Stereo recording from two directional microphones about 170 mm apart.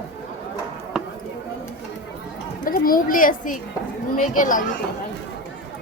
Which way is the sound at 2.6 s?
55° left (ahead or behind).